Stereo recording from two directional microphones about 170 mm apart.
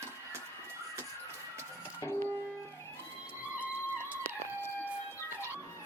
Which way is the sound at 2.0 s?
15° left (ahead or behind).